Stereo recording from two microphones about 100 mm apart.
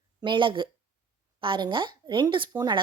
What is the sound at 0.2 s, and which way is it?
A woman's voice, 55° right (ahead or behind).